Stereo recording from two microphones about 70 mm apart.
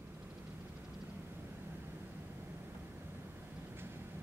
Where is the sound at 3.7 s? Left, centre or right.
Right.